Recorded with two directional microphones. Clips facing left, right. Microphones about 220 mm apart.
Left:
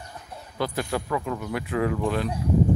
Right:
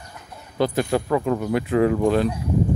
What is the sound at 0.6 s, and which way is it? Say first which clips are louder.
Speech: right 7 dB; 25° right (ahead or behind).